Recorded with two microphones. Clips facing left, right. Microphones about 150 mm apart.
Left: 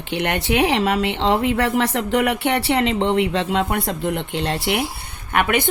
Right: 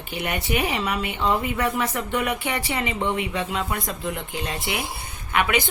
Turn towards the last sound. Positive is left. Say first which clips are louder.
# left 3 dB
turn(degrees=55)  # may be behind; listen again after turning